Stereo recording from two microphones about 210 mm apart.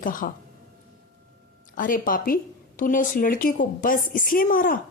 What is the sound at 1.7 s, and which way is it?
Speech, 40° left (ahead or behind).